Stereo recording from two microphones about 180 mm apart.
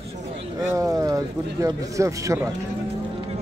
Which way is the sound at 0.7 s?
15° right (ahead or behind).